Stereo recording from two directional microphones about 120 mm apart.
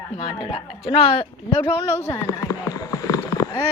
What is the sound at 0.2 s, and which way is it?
A woman's voice, 55° left (ahead or behind).